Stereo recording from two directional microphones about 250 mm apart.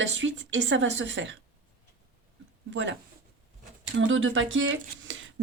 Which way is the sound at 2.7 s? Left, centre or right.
Right.